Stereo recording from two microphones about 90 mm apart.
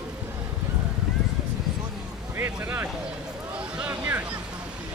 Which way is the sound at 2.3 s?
25° right (ahead or behind).